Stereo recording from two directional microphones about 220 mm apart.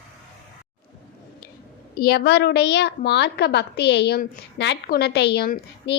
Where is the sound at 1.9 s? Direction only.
45° left (ahead or behind).